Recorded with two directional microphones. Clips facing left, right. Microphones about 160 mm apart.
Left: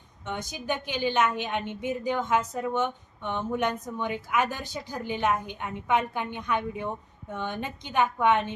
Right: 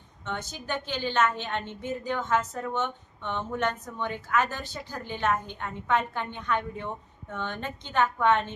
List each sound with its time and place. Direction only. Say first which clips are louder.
0.3 s a woman's voice: left 2 dB; 15° left (ahead or behind)